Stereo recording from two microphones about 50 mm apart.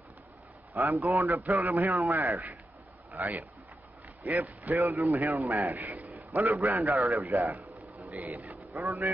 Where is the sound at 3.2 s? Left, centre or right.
Right.